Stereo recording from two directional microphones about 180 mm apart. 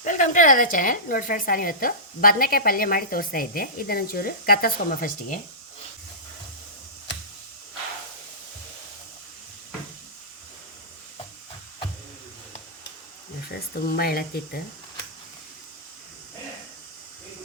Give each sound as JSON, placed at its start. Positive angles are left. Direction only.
{"t": 0.0, "sound": "speech", "side_deg": 45}
{"t": 13.5, "sound": "speech", "side_deg": 60}